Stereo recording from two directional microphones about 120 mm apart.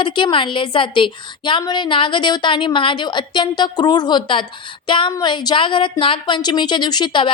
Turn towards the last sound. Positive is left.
turn(degrees=40)  # may be behind; listen again after turning